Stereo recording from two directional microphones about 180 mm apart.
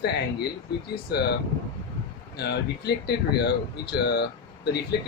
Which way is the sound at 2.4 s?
65° left (ahead or behind).